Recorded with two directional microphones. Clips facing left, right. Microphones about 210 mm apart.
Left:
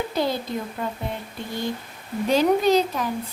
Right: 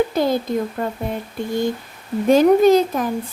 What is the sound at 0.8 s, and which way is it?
Speech, 50° right (ahead or behind).